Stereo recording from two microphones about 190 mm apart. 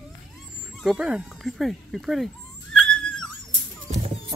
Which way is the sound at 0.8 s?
5° right (ahead or behind).